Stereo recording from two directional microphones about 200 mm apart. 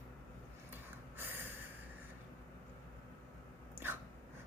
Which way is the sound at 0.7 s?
10° right (ahead or behind).